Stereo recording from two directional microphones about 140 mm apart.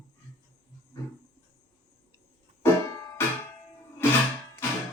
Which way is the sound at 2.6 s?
25° left (ahead or behind).